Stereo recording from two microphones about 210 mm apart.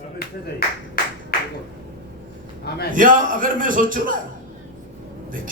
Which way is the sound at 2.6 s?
50° left (ahead or behind).